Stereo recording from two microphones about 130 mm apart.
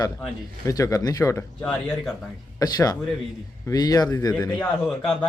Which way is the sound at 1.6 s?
5° left (ahead or behind).